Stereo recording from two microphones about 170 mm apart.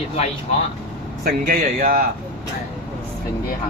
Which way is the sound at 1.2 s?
60° right (ahead or behind).